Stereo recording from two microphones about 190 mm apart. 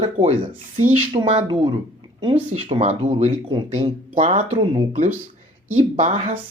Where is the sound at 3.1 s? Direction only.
25° right (ahead or behind).